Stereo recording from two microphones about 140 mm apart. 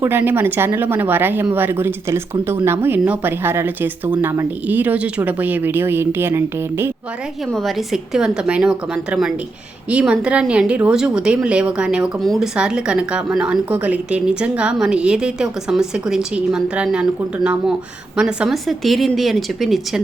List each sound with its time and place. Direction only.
0.0 s speech: 15° right (ahead or behind)
8.1 s speech: 5° right (ahead or behind)
9.9 s speech: 10° right (ahead or behind)